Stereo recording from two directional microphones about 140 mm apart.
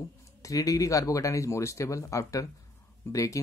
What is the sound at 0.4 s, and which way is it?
Speech, 25° left (ahead or behind).